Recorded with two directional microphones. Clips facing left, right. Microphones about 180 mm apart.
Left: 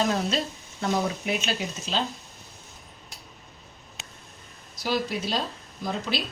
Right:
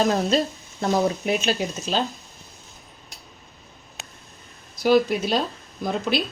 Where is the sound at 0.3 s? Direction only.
40° right (ahead or behind).